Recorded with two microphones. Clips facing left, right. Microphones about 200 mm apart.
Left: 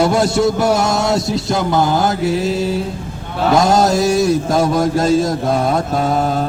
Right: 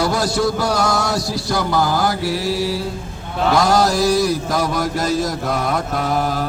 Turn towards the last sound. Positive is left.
turn(degrees=25)  # may be behind; listen again after turning